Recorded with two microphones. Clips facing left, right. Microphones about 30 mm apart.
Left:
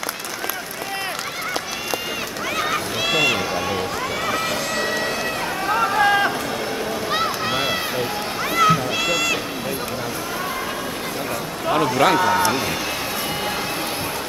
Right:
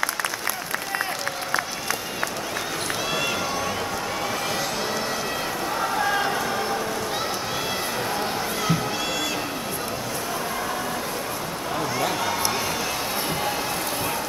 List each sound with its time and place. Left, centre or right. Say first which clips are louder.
3.1 s run: left 9 dB; left
5.7 s run: left 8 dB; left
8.5 s music: left 12 dB; left
11.7 s a sound: left 10 dB; left
12.2 s run: left 7 dB; centre